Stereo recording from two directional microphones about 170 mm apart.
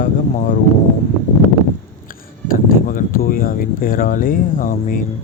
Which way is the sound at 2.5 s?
55° left (ahead or behind).